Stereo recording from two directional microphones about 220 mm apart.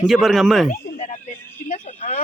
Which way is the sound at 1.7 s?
35° left (ahead or behind).